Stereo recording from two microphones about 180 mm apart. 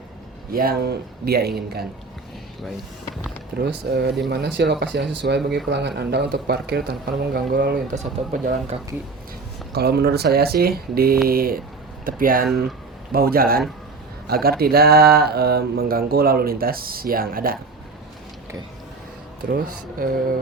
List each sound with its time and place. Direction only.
0.5 s speech: 55° right (ahead or behind)
3.6 s speech: 70° right (ahead or behind)
7.9 s speech: 50° right (ahead or behind)
9.7 s speech: 60° right (ahead or behind)
19.5 s speech: 55° right (ahead or behind)